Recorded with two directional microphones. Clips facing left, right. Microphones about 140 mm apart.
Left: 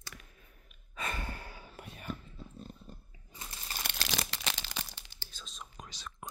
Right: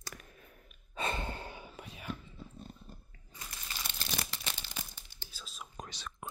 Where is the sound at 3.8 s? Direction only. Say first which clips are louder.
Left 3 dB; 85° left.